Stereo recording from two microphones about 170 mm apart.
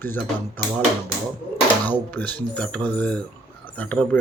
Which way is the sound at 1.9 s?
10° left (ahead or behind).